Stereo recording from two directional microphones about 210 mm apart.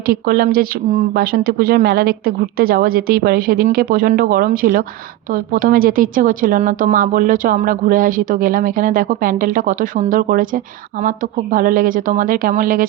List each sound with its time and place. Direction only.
0.0 s a woman's voice: 45° right (ahead or behind)